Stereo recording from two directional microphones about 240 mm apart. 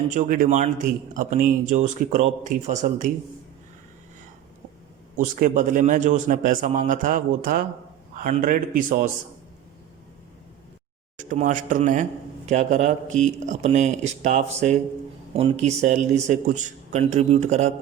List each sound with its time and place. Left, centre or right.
0.1 s a man's voice: right
5.1 s a man's voice: right
11.2 s a man's voice: right